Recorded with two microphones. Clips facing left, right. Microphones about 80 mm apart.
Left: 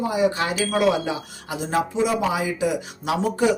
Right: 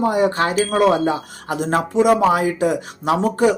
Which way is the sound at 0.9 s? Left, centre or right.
Right.